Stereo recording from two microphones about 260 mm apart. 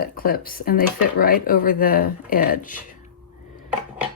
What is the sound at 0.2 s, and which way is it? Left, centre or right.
Speech, left.